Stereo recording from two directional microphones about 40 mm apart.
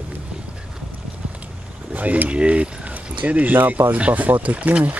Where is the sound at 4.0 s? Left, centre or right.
Right.